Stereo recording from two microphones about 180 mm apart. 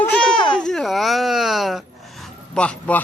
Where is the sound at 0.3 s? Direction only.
25° left (ahead or behind).